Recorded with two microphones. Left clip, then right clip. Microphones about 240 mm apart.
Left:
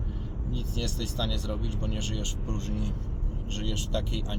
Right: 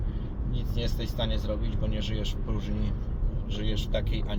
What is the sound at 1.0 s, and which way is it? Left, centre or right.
Speech, centre.